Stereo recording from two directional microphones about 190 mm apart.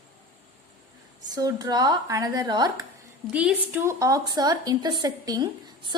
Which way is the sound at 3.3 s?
5° right (ahead or behind).